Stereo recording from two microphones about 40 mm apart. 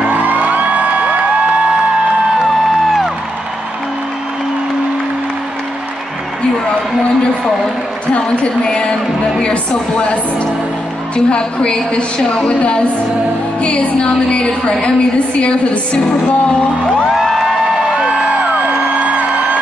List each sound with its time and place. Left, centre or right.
0.0 s music: right
8.6 s a woman's voice: centre
17.1 s a sound: centre
17.9 s music: right